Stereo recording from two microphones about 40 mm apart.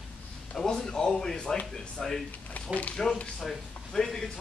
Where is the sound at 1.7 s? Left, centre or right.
Centre.